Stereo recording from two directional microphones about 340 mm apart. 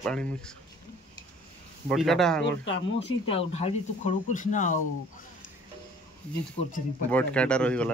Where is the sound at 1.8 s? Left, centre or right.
Centre.